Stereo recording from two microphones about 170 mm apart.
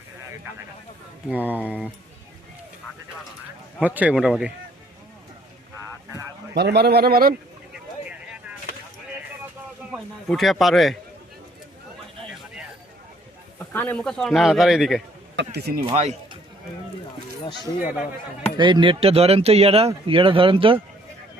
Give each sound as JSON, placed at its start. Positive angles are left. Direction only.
{"t": 1.3, "sound": "speech", "side_deg": -10}
{"t": 3.8, "sound": "speech", "side_deg": -10}
{"t": 6.5, "sound": "a man's voice", "side_deg": -75}
{"t": 7.7, "sound": "a sound", "side_deg": -5}
{"t": 9.9, "sound": "speech", "side_deg": 0}
{"t": 13.6, "sound": "speech", "side_deg": 10}
{"t": 15.4, "sound": "a man's voice", "side_deg": -70}
{"t": 15.8, "sound": "speech", "side_deg": -30}
{"t": 18.5, "sound": "speech", "side_deg": -25}